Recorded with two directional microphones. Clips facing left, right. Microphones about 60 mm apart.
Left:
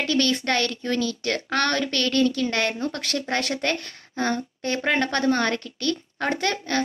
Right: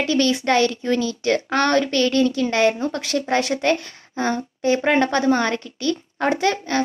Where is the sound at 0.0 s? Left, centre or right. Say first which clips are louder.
Right 4 dB; centre.